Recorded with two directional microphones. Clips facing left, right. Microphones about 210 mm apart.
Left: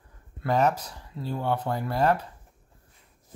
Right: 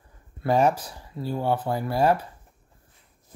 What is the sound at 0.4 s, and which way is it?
Speech, 10° right (ahead or behind).